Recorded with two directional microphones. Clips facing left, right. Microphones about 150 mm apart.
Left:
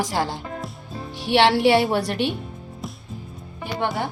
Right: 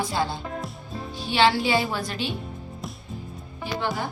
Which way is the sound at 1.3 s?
70° left (ahead or behind).